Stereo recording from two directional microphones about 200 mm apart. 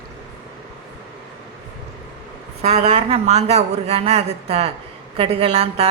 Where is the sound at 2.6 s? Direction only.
35° right (ahead or behind).